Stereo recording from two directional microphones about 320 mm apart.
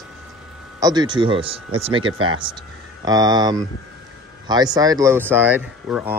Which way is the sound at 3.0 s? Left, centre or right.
Centre.